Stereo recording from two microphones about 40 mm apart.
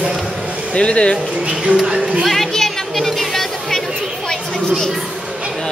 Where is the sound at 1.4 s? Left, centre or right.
Right.